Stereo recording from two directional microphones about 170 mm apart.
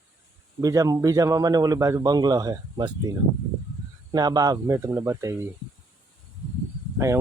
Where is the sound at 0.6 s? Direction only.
20° right (ahead or behind).